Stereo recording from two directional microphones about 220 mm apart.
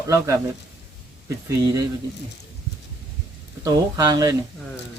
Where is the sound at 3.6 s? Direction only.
15° right (ahead or behind).